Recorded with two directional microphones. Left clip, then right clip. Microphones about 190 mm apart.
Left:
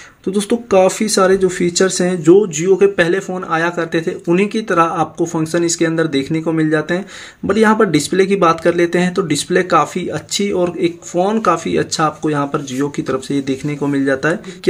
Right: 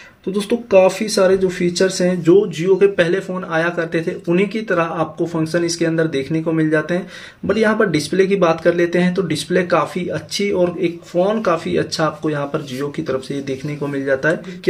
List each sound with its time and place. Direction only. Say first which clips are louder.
0.3 s speech: even; 30° left (ahead or behind)